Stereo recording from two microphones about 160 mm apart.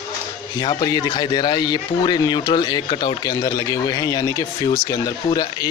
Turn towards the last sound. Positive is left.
turn(degrees=25)  # may be behind; listen again after turning